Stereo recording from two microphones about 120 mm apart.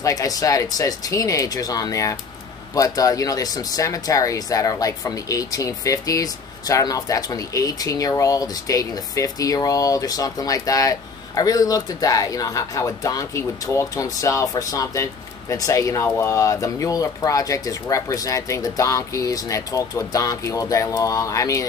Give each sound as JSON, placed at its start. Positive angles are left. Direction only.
{"t": 0.0, "sound": "speech", "side_deg": 30}